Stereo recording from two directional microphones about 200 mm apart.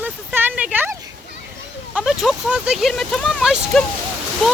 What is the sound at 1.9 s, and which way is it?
Speech, centre (ahead or behind).